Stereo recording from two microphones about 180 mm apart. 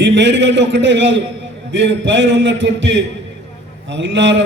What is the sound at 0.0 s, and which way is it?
A man's voice, 80° right.